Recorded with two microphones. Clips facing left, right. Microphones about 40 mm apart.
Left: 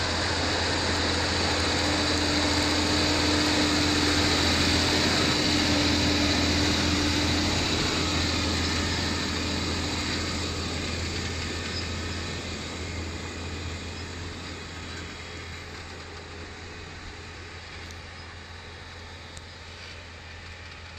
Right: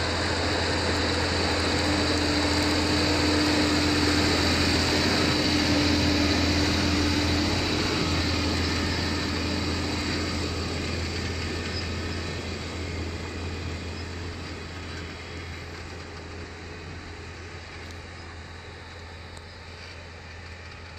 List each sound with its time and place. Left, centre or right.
0.0 s vehicle: right
0.3 s vehicle: left; by 5.3 s centre
5.3 s a sound: centre
7.8 s vehicle: centre
8.2 s vehicle: left
11.8 s vehicle: right
12.3 s vehicle: left
12.7 s vehicle: right
13.6 s vehicle: left